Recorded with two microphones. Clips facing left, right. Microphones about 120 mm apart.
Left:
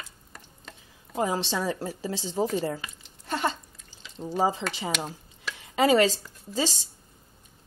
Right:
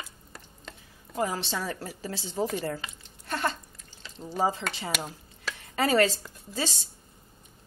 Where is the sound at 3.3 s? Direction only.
20° left (ahead or behind).